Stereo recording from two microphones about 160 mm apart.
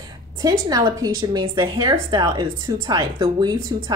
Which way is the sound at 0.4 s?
20° right (ahead or behind).